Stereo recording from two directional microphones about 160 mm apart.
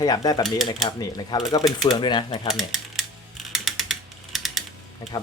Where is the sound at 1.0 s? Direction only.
25° left (ahead or behind).